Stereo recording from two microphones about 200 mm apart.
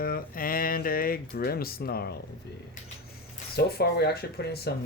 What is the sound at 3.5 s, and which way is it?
Speech, 50° left (ahead or behind).